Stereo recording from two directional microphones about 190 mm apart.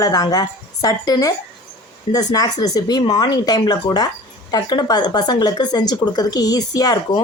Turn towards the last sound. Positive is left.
turn(degrees=20)  # may be behind; listen again after turning